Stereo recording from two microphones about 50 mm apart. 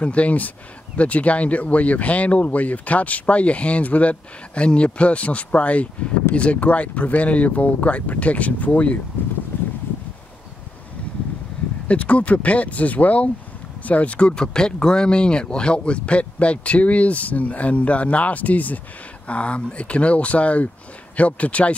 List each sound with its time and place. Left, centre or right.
0.0 s speech: left
11.9 s speech: left
14.3 s speech: centre